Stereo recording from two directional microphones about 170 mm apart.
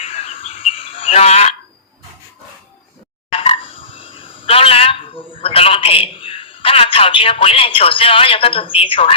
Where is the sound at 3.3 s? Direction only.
35° left (ahead or behind).